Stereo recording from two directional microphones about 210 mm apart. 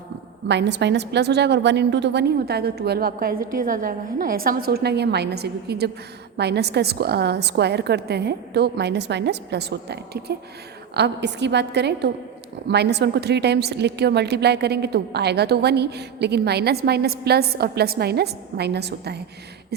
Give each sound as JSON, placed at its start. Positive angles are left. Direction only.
{"t": 0.4, "sound": "a woman's voice", "side_deg": -55}